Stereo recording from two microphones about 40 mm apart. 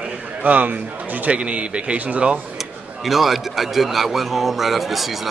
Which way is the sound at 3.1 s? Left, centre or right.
Centre.